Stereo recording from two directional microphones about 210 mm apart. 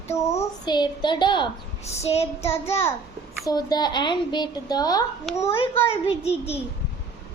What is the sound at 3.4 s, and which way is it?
A woman's voice, 20° left (ahead or behind).